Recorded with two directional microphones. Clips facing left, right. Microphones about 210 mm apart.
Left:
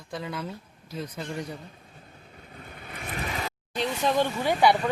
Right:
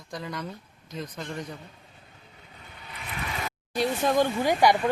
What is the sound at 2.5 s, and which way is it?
Vehicle, 50° left (ahead or behind).